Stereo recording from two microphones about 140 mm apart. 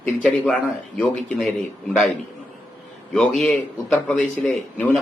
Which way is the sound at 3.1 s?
5° left (ahead or behind).